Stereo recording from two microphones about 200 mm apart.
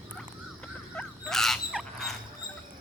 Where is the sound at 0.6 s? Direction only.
5° left (ahead or behind).